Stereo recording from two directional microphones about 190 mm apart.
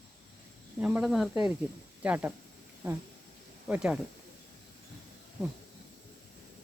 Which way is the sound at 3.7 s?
5° right (ahead or behind).